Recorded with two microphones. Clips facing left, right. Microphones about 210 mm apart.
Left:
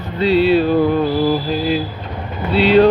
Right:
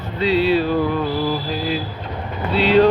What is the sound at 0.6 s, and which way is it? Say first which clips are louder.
Music: left 5 dB; 25° left (ahead or behind).